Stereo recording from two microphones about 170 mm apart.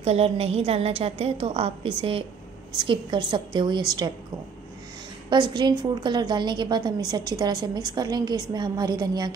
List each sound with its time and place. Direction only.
0.0 s a woman's voice: 35° right (ahead or behind)
5.3 s a woman's voice: 25° right (ahead or behind)